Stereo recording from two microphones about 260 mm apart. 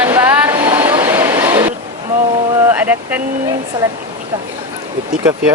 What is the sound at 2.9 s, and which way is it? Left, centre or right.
Vehicle, centre.